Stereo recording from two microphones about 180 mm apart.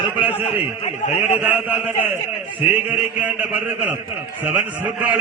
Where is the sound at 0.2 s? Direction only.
10° right (ahead or behind).